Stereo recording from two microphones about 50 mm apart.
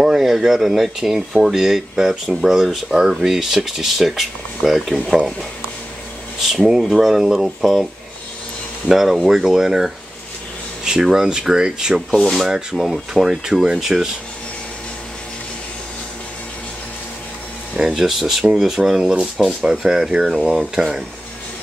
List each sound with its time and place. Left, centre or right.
0.0 s speech: centre
6.4 s speech: centre
12.7 s speech: centre
17.7 s speech: centre
20.4 s speech: centre